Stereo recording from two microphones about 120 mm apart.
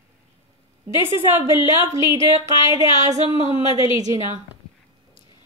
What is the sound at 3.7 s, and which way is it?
Speech, 50° left (ahead or behind).